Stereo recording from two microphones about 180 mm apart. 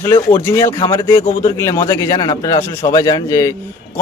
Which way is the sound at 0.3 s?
15° left (ahead or behind).